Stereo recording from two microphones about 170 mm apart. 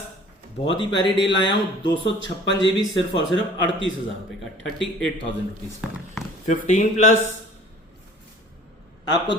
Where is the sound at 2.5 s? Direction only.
90° left.